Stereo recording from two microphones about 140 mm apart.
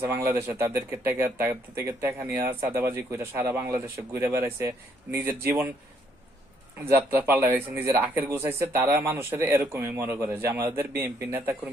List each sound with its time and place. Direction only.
0.0 s speech: 15° right (ahead or behind)
6.8 s speech: 15° right (ahead or behind)